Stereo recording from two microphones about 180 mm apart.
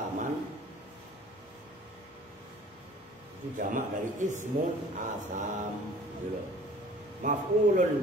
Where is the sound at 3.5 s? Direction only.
45° right (ahead or behind).